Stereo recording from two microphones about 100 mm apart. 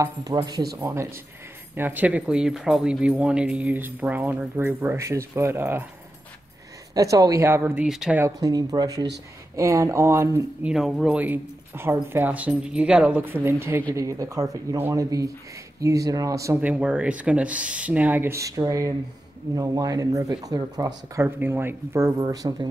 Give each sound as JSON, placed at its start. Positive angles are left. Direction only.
{"t": 0.0, "sound": "speech", "side_deg": -40}
{"t": 0.8, "sound": "speech", "side_deg": -25}
{"t": 6.9, "sound": "speech", "side_deg": -35}
{"t": 7.8, "sound": "speech", "side_deg": -10}
{"t": 8.4, "sound": "speech", "side_deg": -35}
{"t": 10.6, "sound": "speech", "side_deg": -5}
{"t": 14.8, "sound": "speech", "side_deg": -25}
{"t": 15.0, "sound": "speech", "side_deg": -35}
{"t": 16.6, "sound": "speech", "side_deg": -15}
{"t": 18.3, "sound": "speech", "side_deg": -30}
{"t": 21.4, "sound": "speech", "side_deg": -20}